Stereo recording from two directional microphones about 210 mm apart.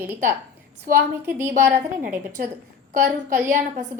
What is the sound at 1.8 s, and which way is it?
Speech, 40° right (ahead or behind).